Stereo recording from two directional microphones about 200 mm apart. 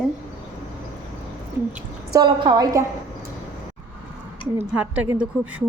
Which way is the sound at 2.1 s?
20° right (ahead or behind).